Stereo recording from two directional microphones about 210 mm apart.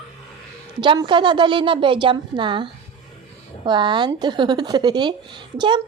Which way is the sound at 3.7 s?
20° right (ahead or behind).